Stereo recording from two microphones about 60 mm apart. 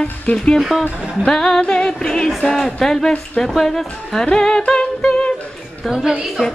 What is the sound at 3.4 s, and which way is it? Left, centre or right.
Speech, centre.